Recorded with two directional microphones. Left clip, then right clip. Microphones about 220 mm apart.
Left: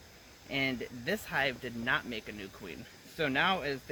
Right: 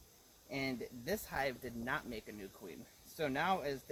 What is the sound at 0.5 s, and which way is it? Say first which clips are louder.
Speech: left 8 dB; 20° right (ahead or behind).